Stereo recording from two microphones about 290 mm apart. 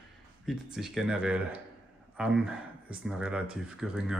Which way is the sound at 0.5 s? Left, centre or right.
Centre.